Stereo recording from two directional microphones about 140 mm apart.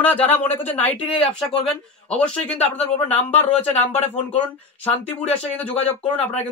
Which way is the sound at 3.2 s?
50° left (ahead or behind).